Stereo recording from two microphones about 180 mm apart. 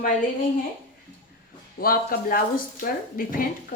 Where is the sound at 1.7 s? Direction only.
55° left (ahead or behind).